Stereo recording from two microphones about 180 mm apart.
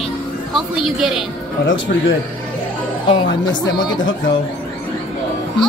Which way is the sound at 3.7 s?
25° left (ahead or behind).